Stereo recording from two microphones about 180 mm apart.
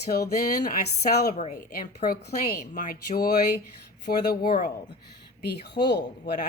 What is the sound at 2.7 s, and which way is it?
Speech, 50° left (ahead or behind).